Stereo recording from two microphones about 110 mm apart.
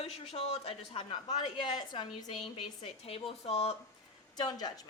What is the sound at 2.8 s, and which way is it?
Speech, 60° left (ahead or behind).